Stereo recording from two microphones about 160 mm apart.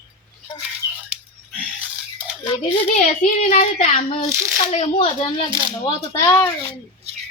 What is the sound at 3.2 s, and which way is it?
Speech, 50° left (ahead or behind).